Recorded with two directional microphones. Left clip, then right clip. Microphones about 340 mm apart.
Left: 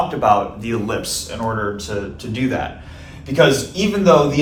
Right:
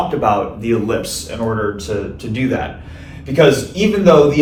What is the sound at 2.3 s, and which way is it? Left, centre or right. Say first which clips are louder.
A man's voice: right 2 dB; centre.